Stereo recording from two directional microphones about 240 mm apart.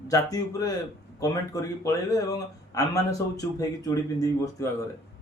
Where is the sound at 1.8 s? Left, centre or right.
Centre.